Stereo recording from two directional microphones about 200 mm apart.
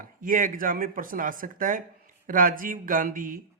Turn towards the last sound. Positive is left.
turn(degrees=-40)  # may be behind; listen again after turning